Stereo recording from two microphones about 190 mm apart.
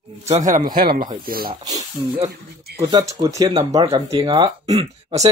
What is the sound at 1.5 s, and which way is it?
Speech, 25° right (ahead or behind).